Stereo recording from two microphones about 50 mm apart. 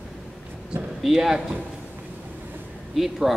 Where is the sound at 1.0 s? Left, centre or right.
Centre.